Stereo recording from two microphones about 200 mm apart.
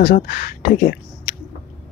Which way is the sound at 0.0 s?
50° left (ahead or behind).